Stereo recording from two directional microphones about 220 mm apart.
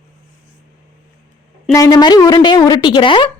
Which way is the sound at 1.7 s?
15° left (ahead or behind).